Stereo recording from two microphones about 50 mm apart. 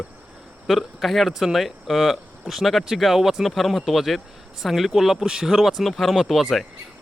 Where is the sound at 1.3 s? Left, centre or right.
Centre.